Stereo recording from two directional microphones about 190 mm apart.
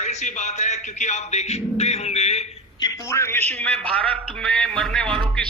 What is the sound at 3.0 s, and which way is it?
Speech, 15° left (ahead or behind).